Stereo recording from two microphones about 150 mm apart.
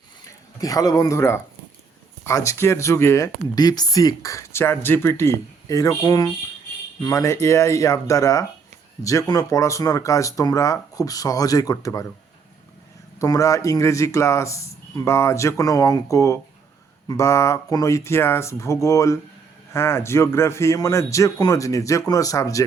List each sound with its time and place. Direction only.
0.3 s speech: 25° left (ahead or behind)
13.1 s speech: 20° left (ahead or behind)